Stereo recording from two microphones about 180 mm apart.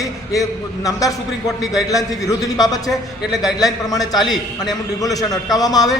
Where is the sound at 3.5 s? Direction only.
20° left (ahead or behind).